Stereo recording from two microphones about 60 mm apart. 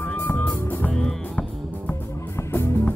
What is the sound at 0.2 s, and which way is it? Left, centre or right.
Music, left.